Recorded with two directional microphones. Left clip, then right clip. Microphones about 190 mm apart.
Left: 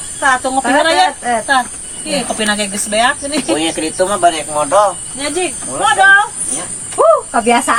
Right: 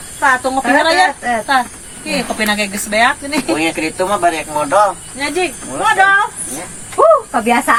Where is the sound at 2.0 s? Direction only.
10° left (ahead or behind).